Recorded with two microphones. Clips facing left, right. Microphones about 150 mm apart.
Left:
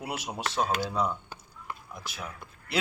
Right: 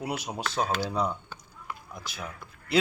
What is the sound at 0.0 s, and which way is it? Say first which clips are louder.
A man's voice: right 2 dB; 5° left (ahead or behind).